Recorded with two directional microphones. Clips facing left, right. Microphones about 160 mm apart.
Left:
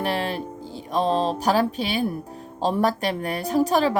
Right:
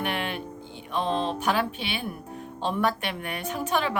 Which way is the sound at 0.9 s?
35° left (ahead or behind).